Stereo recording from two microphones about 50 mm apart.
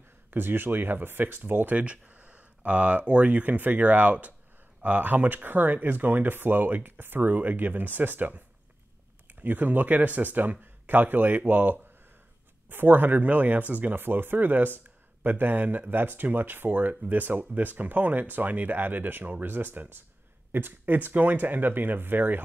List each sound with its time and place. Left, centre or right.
0.3 s speech: right
1.7 s speech: right